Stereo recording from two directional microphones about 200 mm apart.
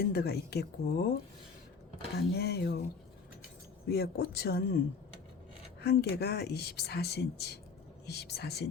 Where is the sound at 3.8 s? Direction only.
50° left (ahead or behind).